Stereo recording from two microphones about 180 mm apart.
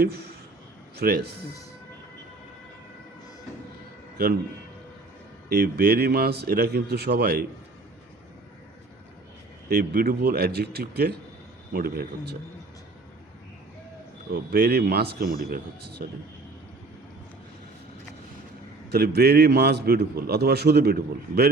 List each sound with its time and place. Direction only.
0.0 s a man's voice: 60° right (ahead or behind)
5.5 s a man's voice: 60° right (ahead or behind)
9.6 s a man's voice: 55° right (ahead or behind)
14.3 s a man's voice: 55° right (ahead or behind)
18.9 s a man's voice: 60° right (ahead or behind)